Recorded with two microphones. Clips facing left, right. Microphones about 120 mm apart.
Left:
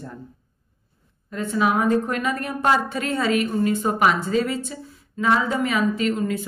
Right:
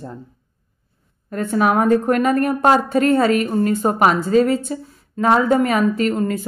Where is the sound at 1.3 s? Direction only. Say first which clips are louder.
Right 4 dB; 50° right (ahead or behind).